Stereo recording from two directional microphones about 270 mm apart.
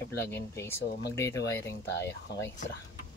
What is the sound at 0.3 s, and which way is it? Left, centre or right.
Speech, centre.